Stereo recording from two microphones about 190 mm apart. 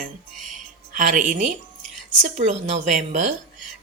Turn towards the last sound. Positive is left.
turn(degrees=-40)  # may be behind; listen again after turning